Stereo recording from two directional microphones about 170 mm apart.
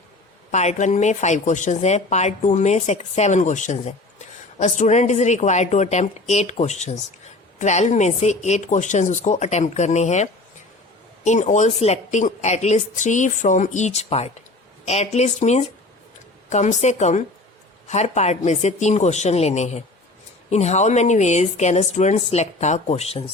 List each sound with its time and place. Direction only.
0.5 s speech: 40° left (ahead or behind)